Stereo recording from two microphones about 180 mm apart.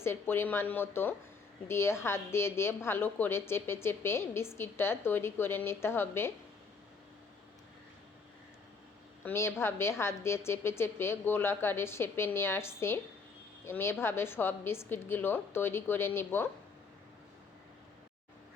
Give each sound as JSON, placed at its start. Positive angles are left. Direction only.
{"t": 0.0, "sound": "a woman's voice", "side_deg": 15}
{"t": 9.2, "sound": "a woman's voice", "side_deg": 15}